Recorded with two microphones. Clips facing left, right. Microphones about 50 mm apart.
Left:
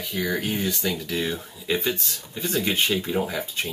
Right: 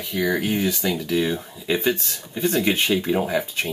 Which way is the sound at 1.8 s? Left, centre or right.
Right.